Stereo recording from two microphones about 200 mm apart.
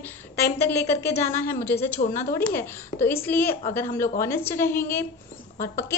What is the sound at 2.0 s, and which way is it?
Speech, 35° left (ahead or behind).